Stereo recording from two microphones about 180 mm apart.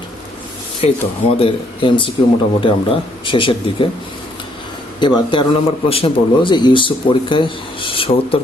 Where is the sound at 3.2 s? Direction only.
30° left (ahead or behind).